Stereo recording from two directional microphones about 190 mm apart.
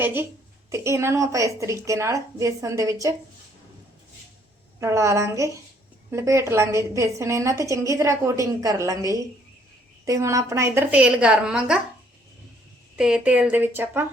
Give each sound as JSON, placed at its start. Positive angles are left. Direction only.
{"t": 0.0, "sound": "a woman's voice", "side_deg": -10}
{"t": 4.8, "sound": "a woman's voice", "side_deg": -15}
{"t": 13.0, "sound": "a woman's voice", "side_deg": -5}